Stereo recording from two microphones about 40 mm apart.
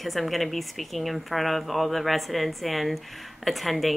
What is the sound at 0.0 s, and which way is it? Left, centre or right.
Speech, centre.